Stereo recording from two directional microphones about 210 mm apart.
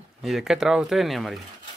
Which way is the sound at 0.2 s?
Centre (ahead or behind).